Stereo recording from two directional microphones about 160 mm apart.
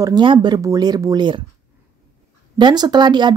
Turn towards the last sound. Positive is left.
turn(degrees=-30)  # may be behind; listen again after turning